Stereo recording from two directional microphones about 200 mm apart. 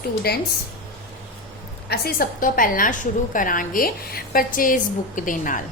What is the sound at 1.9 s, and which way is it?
A woman's voice, 50° left (ahead or behind).